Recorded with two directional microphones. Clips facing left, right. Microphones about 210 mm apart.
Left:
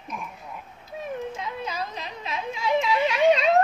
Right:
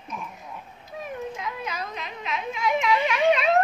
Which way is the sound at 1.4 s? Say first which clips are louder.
Left 1 dB; 30° left (ahead or behind).